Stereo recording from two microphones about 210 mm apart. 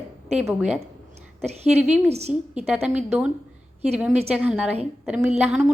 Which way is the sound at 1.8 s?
5° right (ahead or behind).